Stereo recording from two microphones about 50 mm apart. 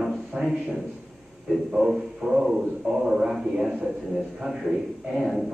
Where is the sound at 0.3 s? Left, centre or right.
Centre.